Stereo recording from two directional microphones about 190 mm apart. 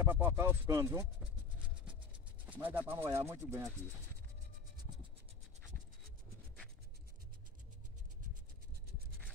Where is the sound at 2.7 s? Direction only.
10° right (ahead or behind).